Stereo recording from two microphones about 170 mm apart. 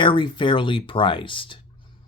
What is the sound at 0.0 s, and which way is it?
Speech, 30° left (ahead or behind).